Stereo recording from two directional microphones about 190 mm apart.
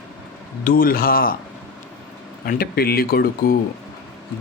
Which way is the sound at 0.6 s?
50° left (ahead or behind).